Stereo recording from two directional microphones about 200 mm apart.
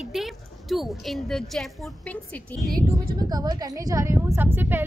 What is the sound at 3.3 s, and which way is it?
A woman's voice, 20° right (ahead or behind).